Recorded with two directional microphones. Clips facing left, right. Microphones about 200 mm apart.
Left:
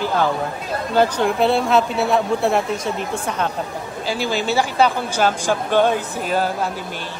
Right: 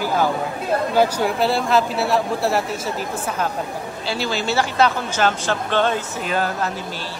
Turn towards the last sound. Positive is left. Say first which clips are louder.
# left 2 dB
turn(degrees=10)  # may be behind; listen again after turning